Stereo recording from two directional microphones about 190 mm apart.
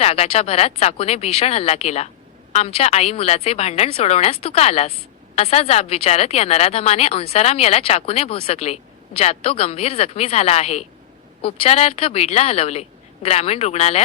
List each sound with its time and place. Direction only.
0.0 s a woman's voice: 30° left (ahead or behind)